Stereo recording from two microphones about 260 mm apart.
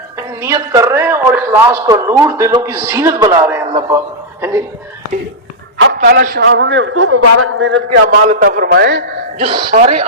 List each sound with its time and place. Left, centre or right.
0.4 s a man's voice: centre
5.7 s a man's voice: right
8.1 s a man's voice: right
9.4 s speech: centre